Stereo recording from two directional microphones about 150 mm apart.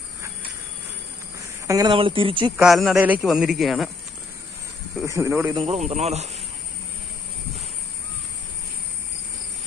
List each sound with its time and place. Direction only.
1.7 s speech: 25° right (ahead or behind)
2.0 s speech: 35° right (ahead or behind)
2.5 s speech: 5° right (ahead or behind)
5.0 s speech: 20° right (ahead or behind)
5.7 s speech: 45° right (ahead or behind)